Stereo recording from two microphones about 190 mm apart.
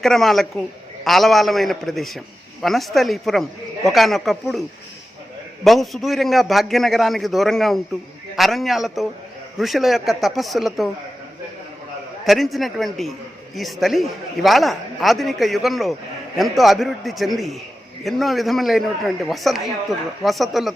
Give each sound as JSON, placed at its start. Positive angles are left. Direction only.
{"t": 0.0, "sound": "a man's voice", "side_deg": 0}
{"t": 5.6, "sound": "a man's voice", "side_deg": 0}
{"t": 12.2, "sound": "a man's voice", "side_deg": 0}